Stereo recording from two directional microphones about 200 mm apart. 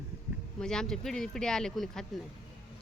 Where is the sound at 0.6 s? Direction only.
5° left (ahead or behind).